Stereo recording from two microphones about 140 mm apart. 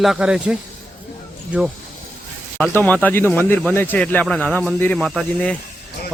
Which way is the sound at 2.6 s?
10° left (ahead or behind).